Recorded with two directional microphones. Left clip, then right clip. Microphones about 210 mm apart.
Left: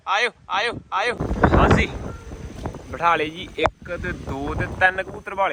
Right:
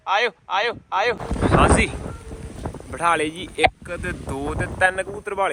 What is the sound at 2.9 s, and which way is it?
Speech, 5° right (ahead or behind).